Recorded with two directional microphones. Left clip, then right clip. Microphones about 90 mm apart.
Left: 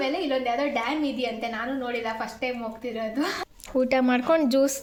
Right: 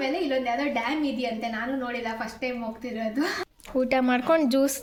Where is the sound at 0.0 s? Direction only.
5° left (ahead or behind).